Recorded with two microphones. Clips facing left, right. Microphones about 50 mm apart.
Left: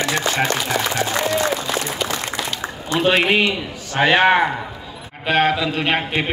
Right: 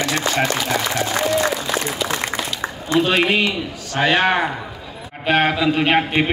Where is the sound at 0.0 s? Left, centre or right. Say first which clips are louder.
Even; left.